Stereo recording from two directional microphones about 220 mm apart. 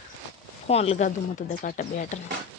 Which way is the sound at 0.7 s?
30° left (ahead or behind).